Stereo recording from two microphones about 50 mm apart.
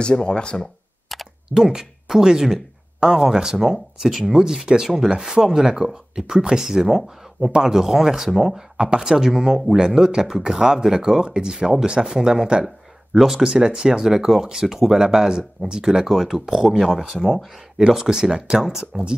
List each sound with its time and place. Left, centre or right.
0.0 s speech: centre
1.5 s speech: centre